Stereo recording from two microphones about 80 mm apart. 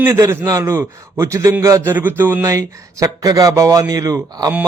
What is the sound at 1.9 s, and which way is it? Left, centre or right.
Speech, right.